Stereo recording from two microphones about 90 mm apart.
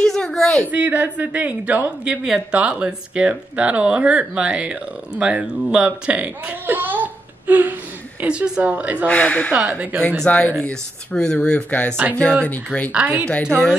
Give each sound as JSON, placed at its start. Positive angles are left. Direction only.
{"t": 0.0, "sound": "a sound", "side_deg": 5}
{"t": 0.7, "sound": "speech", "side_deg": -20}
{"t": 9.0, "sound": "speech", "side_deg": 10}
{"t": 9.5, "sound": "speech", "side_deg": -15}
{"t": 10.2, "sound": "speech", "side_deg": 15}
{"t": 12.9, "sound": "speech", "side_deg": -15}
{"t": 13.5, "sound": "speech", "side_deg": 5}